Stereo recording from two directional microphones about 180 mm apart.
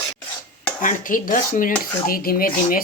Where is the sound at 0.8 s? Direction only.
45° left (ahead or behind).